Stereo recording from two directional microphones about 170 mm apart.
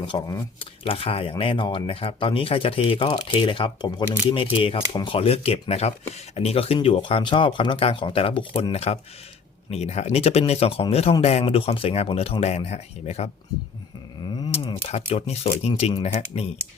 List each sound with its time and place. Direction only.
0.0 s speech: 25° left (ahead or behind)
14.5 s speech: 35° left (ahead or behind)